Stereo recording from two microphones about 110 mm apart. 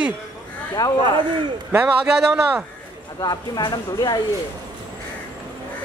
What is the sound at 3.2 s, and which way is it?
Speech, 40° left (ahead or behind).